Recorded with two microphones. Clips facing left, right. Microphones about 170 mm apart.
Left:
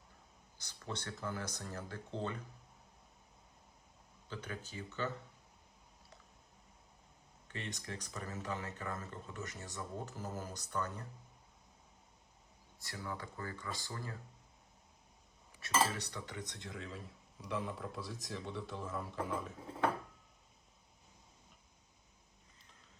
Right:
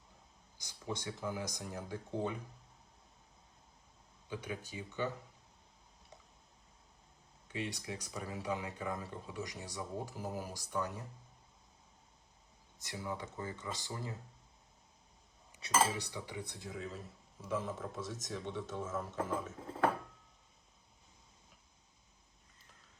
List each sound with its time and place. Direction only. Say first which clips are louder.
0.6 s speech: right 3 dB; 10° right (ahead or behind)
4.3 s speech: right 3 dB; 10° right (ahead or behind)
7.4 s speech: right 4 dB; 10° right (ahead or behind)
12.8 s speech: right 3 dB; 20° right (ahead or behind)
15.7 s a man's voice: right 2 dB; centre (ahead or behind)